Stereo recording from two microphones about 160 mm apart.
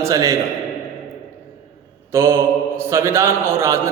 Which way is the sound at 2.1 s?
15° right (ahead or behind).